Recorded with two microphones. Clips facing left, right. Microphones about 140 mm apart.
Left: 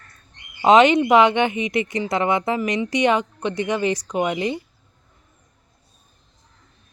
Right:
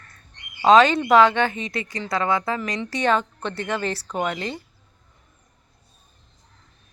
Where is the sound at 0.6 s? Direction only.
20° left (ahead or behind).